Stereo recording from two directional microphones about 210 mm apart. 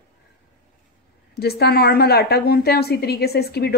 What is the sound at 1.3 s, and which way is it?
A woman's voice, 50° left (ahead or behind).